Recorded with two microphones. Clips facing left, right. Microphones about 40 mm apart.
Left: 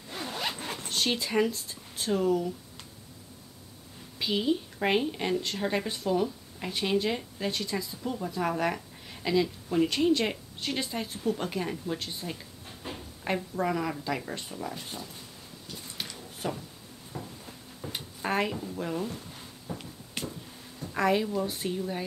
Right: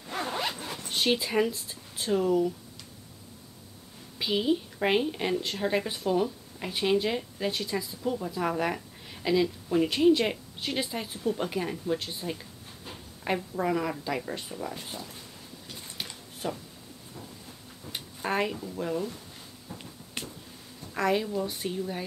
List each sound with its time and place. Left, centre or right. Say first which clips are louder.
0.6 s zipper: left 1 dB; left
0.8 s speech: right 3 dB; centre
4.2 s a woman's voice: right 1 dB; centre
16.4 s a woman's voice: even; centre
17.9 s speech: even; centre
20.9 s a woman's voice: left 1 dB; centre